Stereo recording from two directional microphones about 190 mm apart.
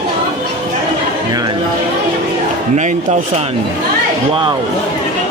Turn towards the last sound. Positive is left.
turn(degrees=-40)  # may be behind; listen again after turning